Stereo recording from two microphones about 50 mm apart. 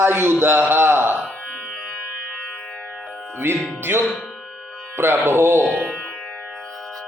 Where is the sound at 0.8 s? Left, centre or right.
Right.